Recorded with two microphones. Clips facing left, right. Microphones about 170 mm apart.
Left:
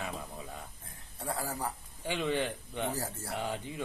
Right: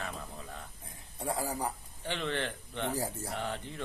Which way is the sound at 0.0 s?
10° left (ahead or behind).